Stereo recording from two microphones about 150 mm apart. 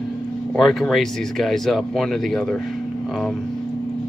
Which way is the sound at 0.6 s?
Centre (ahead or behind).